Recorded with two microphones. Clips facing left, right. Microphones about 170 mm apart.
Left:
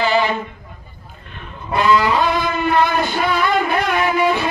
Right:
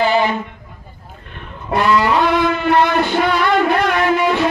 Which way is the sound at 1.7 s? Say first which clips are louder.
Right 1 dB; 65° right (ahead or behind).